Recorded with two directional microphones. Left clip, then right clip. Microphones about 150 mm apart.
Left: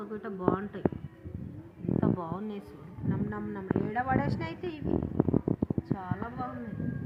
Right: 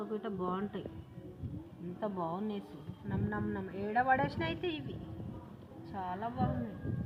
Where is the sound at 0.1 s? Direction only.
30° right (ahead or behind).